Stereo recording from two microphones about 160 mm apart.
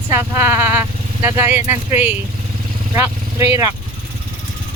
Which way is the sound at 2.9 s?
20° right (ahead or behind).